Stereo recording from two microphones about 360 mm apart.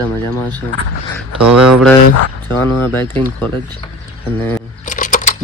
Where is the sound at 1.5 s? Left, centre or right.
Centre.